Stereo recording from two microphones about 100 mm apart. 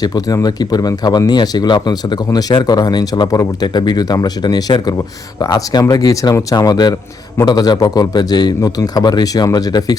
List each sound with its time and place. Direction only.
0.0 s a man's voice: 40° left (ahead or behind)